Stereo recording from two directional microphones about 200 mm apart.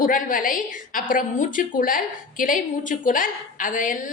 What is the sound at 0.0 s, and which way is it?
A woman's voice, 45° left (ahead or behind).